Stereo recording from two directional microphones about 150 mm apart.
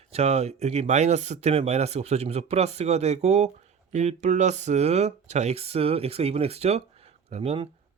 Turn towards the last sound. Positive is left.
turn(degrees=-40)  # may be behind; listen again after turning